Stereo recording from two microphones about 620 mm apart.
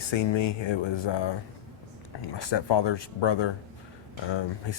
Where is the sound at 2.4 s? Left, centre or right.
Left.